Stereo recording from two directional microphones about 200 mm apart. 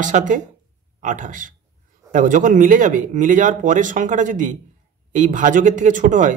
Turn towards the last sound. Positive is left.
turn(degrees=-40)  # may be behind; listen again after turning